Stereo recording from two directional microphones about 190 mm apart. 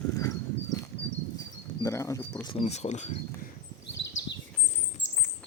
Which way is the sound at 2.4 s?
30° left (ahead or behind).